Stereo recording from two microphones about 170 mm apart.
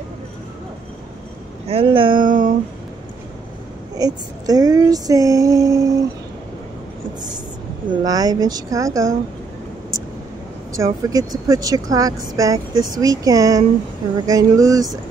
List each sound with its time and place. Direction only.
1.7 s speech: 30° right (ahead or behind)
2.2 s a sound: 55° right (ahead or behind)
3.9 s speech: 20° right (ahead or behind)
7.9 s speech: 20° right (ahead or behind)
10.7 s speech: 20° right (ahead or behind)